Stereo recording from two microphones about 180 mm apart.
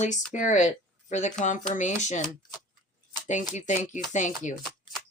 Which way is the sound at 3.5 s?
40° left (ahead or behind).